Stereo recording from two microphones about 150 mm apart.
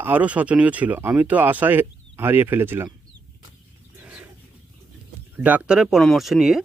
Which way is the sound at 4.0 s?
10° right (ahead or behind).